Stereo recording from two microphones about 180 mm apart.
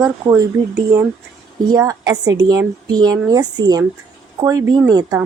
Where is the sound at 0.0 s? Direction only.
20° right (ahead or behind).